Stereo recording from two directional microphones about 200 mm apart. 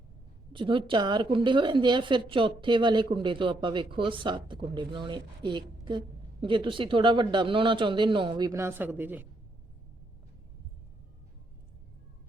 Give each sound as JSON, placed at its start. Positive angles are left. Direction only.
{"t": 0.5, "sound": "a woman's voice", "side_deg": -25}